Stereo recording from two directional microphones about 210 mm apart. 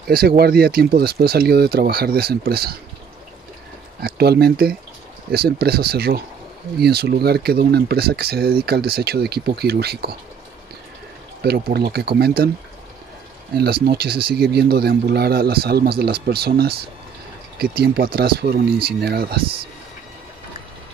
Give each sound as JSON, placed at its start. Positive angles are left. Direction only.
{"t": 0.4, "sound": "speech", "side_deg": -45}
{"t": 4.0, "sound": "speech", "side_deg": -50}
{"t": 11.4, "sound": "speech", "side_deg": -50}
{"t": 13.5, "sound": "speech", "side_deg": -45}